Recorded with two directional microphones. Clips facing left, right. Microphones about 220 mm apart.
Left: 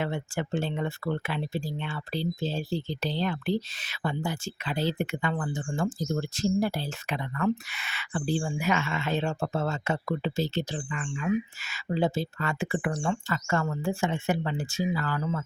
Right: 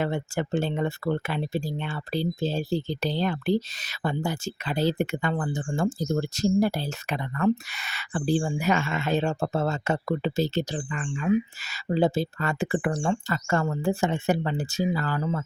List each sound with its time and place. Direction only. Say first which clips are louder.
0.0 s speech: right 3 dB; 40° right (ahead or behind)